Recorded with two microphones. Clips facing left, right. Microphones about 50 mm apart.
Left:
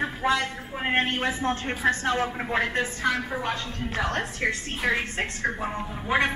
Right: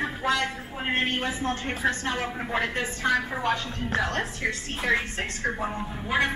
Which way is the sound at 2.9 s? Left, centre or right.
Right.